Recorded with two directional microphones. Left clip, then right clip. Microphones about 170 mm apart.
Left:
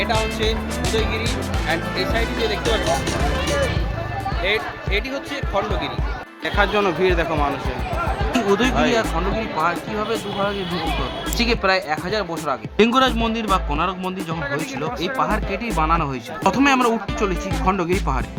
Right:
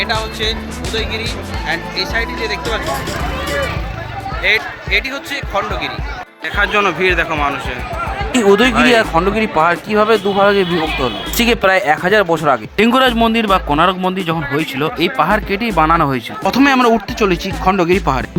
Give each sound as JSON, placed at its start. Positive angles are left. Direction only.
{"t": 0.0, "sound": "speech", "side_deg": 0}
{"t": 1.6, "sound": "speech", "side_deg": 5}
{"t": 4.4, "sound": "music", "side_deg": 10}
{"t": 6.6, "sound": "speech", "side_deg": 0}
{"t": 8.4, "sound": "speech", "side_deg": -45}
{"t": 9.6, "sound": "speech", "side_deg": -50}
{"t": 12.7, "sound": "a man's voice", "side_deg": -30}